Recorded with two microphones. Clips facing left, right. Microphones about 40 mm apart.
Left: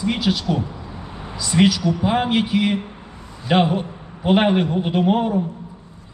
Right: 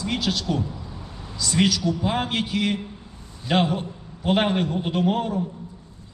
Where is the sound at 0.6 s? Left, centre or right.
Left.